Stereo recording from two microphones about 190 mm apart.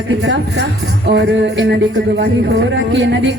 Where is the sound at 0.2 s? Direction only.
65° right (ahead or behind).